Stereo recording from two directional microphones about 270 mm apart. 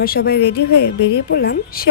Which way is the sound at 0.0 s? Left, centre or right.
Left.